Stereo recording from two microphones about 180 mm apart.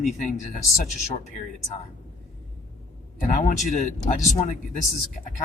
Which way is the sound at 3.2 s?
45° left (ahead or behind).